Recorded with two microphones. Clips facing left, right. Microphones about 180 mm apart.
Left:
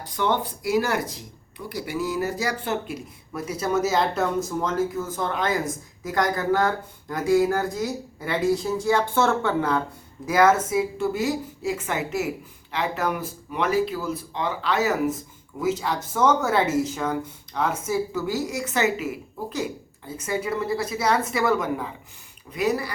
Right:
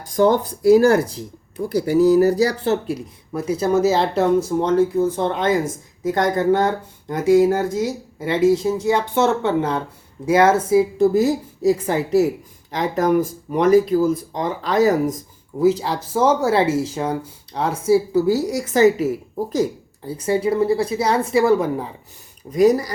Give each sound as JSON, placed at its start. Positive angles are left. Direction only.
{"t": 0.0, "sound": "speech", "side_deg": -40}